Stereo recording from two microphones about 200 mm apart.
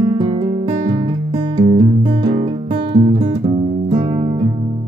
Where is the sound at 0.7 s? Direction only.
40° right (ahead or behind).